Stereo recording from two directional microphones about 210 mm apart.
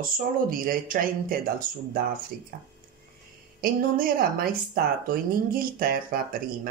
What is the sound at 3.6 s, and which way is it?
A woman's voice, 45° right (ahead or behind).